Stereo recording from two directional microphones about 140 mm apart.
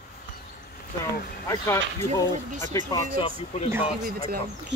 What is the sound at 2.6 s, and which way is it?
Speech, 25° left (ahead or behind).